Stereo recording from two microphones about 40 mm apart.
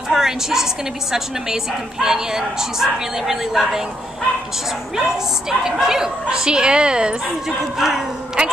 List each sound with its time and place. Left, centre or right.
0.1 s a woman's voice: centre
4.9 s a woman's voice: centre
7.4 s a woman's voice: centre
8.4 s a woman's voice: right